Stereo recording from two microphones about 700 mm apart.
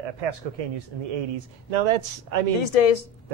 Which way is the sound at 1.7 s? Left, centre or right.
Right.